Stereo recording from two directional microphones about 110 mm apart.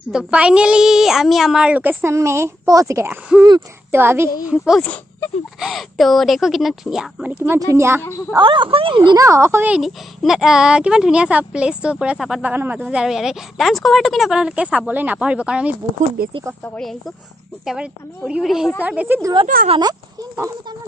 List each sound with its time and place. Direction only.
0.1 s speech: 5° right (ahead or behind); by 3.1 s 30° right (ahead or behind)
3.1 s a woman's voice: 15° right (ahead or behind)
4.8 s a sound: 10° left (ahead or behind)
5.6 s speech: centre (ahead or behind)
7.3 s a woman's voice: 20° right (ahead or behind)
8.4 s speech: 50° right (ahead or behind)
9.1 s a woman's voice: 30° right (ahead or behind)
9.8 s speech: 5° right (ahead or behind)
17.6 s speech: 5° right (ahead or behind)
19.8 s speech: 35° right (ahead or behind)